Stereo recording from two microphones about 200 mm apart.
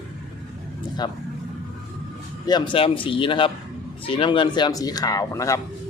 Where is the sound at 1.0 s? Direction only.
20° left (ahead or behind).